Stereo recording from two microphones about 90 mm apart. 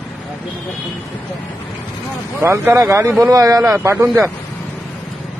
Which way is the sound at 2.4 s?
25° right (ahead or behind).